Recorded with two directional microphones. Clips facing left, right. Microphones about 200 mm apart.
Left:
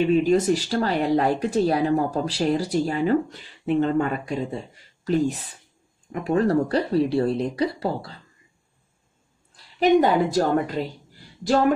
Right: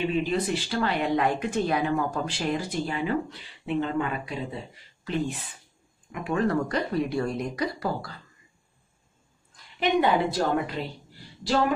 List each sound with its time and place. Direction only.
0.0 s speech: 45° left (ahead or behind); by 8.2 s 30° left (ahead or behind)
9.8 s a woman's voice: 40° left (ahead or behind)